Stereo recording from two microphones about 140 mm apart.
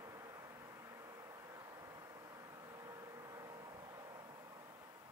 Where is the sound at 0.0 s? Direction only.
25° right (ahead or behind).